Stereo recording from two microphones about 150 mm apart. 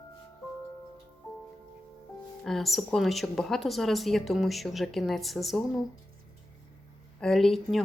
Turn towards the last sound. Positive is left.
turn(degrees=0)  # may be behind; listen again after turning